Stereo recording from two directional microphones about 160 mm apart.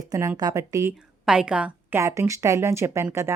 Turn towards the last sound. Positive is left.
turn(degrees=-15)  # may be behind; listen again after turning